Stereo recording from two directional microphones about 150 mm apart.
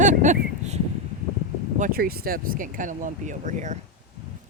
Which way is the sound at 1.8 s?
85° right.